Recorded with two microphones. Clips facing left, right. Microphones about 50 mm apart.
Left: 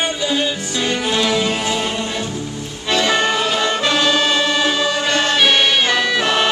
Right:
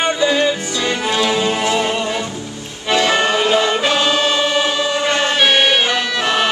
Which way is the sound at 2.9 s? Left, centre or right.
Centre.